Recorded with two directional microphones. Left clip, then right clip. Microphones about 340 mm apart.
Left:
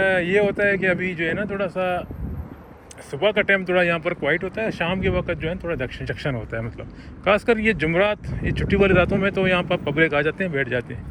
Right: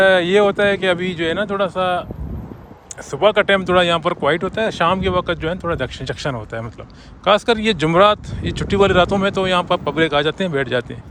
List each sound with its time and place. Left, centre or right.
0.0 s a sound: centre
0.5 s speech: centre
0.9 s speech: right
1.3 s speech: centre
3.2 s speech: centre
4.5 s speech: right
4.9 s speech: centre